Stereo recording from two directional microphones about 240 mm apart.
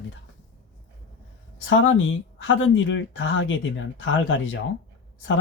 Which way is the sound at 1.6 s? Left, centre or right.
Left.